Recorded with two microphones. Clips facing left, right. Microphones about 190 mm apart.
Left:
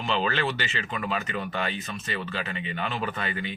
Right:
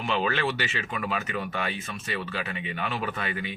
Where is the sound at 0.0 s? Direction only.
10° right (ahead or behind).